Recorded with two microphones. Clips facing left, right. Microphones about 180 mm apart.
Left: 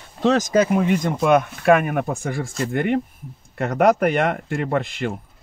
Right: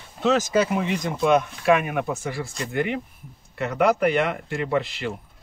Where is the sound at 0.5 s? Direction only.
50° left (ahead or behind).